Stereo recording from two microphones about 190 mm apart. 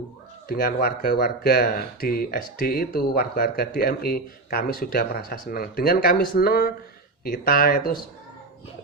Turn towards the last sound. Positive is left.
turn(degrees=50)  # may be behind; listen again after turning